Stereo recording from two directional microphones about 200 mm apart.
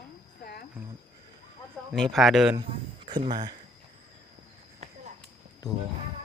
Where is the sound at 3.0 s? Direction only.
25° right (ahead or behind).